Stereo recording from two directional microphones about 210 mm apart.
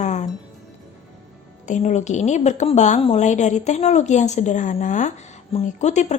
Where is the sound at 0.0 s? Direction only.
35° left (ahead or behind).